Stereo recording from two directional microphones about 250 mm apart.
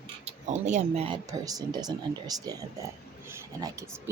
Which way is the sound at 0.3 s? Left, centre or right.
Right.